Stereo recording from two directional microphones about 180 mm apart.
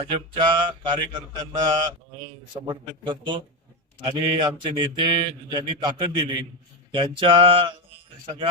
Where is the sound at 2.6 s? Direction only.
25° right (ahead or behind).